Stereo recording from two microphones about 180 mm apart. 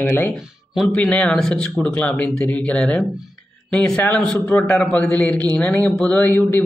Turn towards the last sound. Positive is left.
turn(degrees=10)  # may be behind; listen again after turning